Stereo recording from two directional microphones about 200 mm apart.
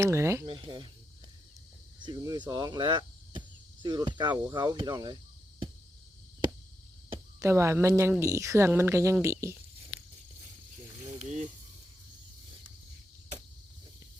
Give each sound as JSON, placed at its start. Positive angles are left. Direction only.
{"t": 0.0, "sound": "speech", "side_deg": -15}
{"t": 0.4, "sound": "speech", "side_deg": -25}
{"t": 2.0, "sound": "speech", "side_deg": -20}
{"t": 7.3, "sound": "speech", "side_deg": -15}
{"t": 11.2, "sound": "mechanisms", "side_deg": -35}